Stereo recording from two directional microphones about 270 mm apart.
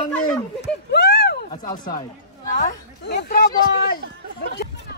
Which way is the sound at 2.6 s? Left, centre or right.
Left.